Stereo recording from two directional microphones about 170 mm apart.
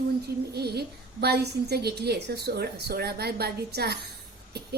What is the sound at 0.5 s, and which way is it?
A woman's voice, 70° right (ahead or behind).